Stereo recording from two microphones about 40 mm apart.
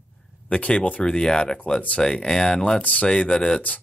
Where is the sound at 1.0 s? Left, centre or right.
Centre.